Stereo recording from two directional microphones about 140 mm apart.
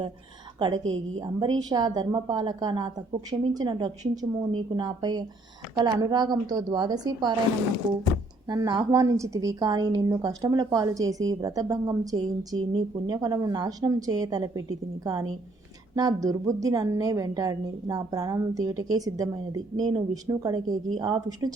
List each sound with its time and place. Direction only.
1.2 s a woman's voice: 30° right (ahead or behind)
8.4 s a woman's voice: 30° right (ahead or behind)